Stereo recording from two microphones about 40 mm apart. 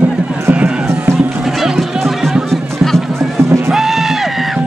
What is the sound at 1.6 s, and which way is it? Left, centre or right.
Music, centre.